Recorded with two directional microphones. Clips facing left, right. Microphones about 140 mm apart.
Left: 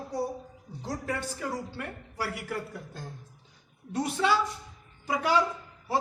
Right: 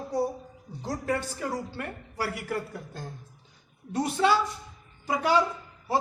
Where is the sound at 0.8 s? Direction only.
45° right (ahead or behind).